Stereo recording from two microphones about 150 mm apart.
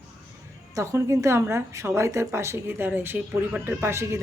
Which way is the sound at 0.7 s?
20° right (ahead or behind).